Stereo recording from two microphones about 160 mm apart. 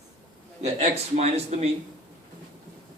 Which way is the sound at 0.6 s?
40° right (ahead or behind).